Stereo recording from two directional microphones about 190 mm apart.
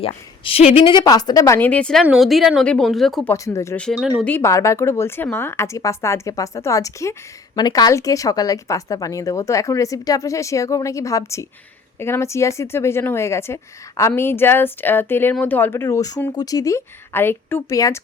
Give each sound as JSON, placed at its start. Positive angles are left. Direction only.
{"t": 0.0, "sound": "a woman's voice", "side_deg": 30}
{"t": 3.3, "sound": "a woman's voice", "side_deg": 15}
{"t": 3.8, "sound": "speech", "side_deg": 0}
{"t": 4.3, "sound": "a woman's voice", "side_deg": 15}